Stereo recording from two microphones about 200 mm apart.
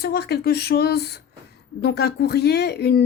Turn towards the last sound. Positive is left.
turn(degrees=55)  # may be behind; listen again after turning